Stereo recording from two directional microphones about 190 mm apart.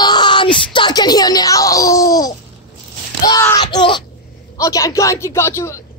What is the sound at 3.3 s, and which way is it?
Child singing, 20° left (ahead or behind).